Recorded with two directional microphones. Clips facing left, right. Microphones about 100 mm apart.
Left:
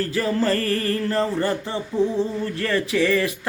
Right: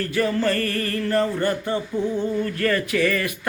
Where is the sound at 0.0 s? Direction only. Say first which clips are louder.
Even; 30° left (ahead or behind).